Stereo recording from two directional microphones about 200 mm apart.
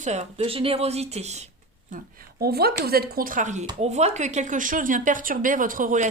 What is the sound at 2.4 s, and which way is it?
Speech, 50° right (ahead or behind).